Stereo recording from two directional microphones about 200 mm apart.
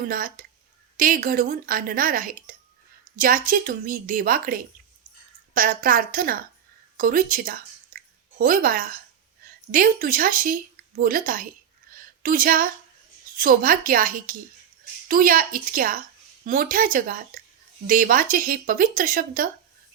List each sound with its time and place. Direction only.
0.1 s a woman's voice: 45° right (ahead or behind)